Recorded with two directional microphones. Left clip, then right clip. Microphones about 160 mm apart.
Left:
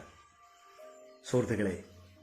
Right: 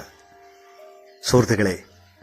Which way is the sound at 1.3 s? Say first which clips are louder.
Right 12 dB; 30° right (ahead or behind).